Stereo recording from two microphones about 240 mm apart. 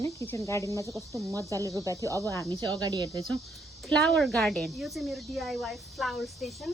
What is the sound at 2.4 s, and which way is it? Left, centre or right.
Speech, centre.